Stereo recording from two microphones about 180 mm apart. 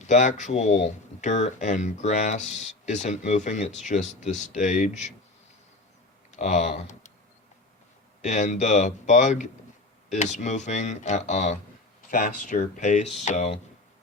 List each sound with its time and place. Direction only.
0.1 s speech: 40° left (ahead or behind)
6.3 s speech: 40° left (ahead or behind)
8.2 s speech: 40° left (ahead or behind)